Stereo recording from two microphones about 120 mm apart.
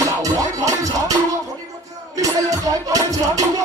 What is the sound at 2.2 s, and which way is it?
Music, 30° right (ahead or behind).